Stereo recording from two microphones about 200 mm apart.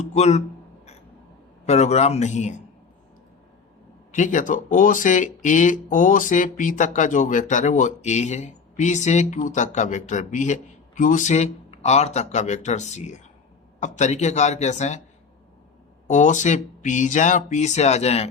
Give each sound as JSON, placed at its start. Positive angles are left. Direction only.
{"t": 0.0, "sound": "speech", "side_deg": 35}
{"t": 1.6, "sound": "speech", "side_deg": 35}
{"t": 4.1, "sound": "speech", "side_deg": 40}
{"t": 16.0, "sound": "speech", "side_deg": 40}